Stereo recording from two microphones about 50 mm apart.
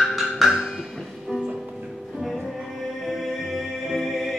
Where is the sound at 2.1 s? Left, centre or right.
Centre.